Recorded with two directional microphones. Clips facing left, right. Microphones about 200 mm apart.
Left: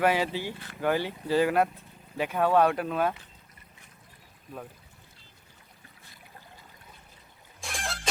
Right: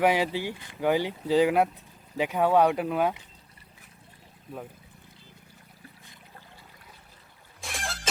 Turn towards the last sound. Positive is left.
turn(degrees=0)  # may be behind; listen again after turning